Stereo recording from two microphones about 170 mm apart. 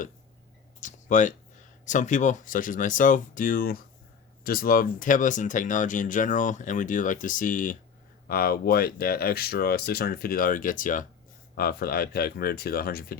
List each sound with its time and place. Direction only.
0.8 s a sound: 50° left (ahead or behind)
1.8 s speech: 45° left (ahead or behind)
8.3 s speech: 60° left (ahead or behind)
11.5 s speech: 65° left (ahead or behind)